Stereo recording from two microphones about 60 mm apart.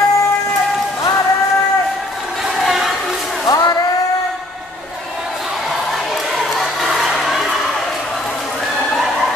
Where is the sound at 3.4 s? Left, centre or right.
Left.